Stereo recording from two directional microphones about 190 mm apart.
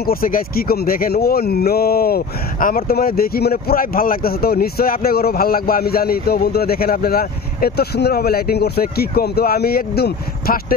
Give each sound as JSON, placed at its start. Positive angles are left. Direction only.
{"t": 0.0, "sound": "speech", "side_deg": 50}